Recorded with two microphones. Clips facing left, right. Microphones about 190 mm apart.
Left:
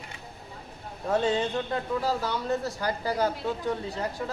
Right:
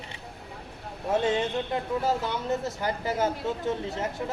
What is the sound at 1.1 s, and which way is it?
A man's voice, 20° right (ahead or behind).